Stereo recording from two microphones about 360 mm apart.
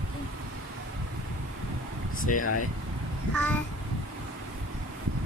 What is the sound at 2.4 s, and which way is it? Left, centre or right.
Speech, left.